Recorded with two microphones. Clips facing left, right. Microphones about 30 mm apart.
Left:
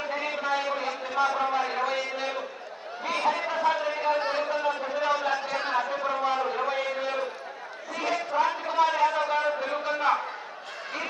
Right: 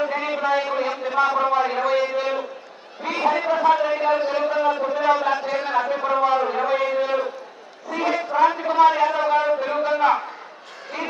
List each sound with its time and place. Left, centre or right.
0.0 s a man's voice: centre